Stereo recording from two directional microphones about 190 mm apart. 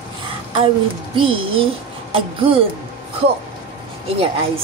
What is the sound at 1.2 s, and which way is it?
A woman's voice, 30° right (ahead or behind).